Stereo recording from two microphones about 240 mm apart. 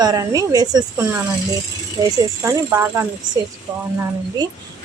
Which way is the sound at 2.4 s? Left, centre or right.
Centre.